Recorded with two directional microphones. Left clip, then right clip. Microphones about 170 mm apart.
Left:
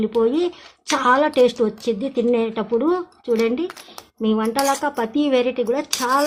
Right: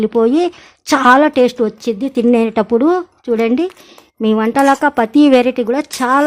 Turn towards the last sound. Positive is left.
turn(degrees=-45)  # may be behind; listen again after turning